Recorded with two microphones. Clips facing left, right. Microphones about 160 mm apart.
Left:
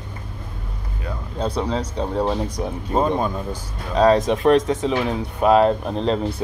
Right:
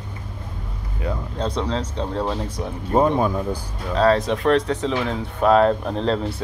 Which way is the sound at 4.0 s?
15° left (ahead or behind).